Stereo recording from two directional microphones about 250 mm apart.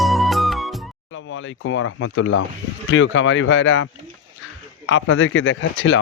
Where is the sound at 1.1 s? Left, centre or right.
Left.